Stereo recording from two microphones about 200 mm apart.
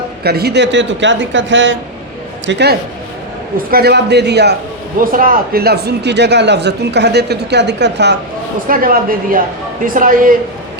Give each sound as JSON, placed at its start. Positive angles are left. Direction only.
{"t": 0.2, "sound": "speech", "side_deg": -50}
{"t": 4.9, "sound": "a man's voice", "side_deg": -45}